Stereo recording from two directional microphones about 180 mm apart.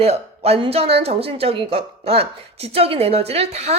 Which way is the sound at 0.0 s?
35° right (ahead or behind).